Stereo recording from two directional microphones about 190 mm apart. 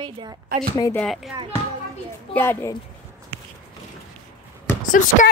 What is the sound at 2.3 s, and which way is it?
Speech, 10° left (ahead or behind).